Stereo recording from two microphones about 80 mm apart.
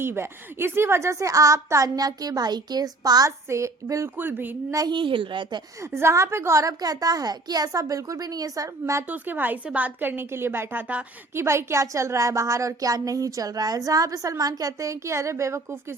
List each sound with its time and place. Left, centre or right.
0.0 s a woman's voice: right
4.2 s a woman's voice: right
4.9 s a woman's voice: right
5.8 s a woman's voice: right
9.0 s a woman's voice: right
11.3 s a woman's voice: right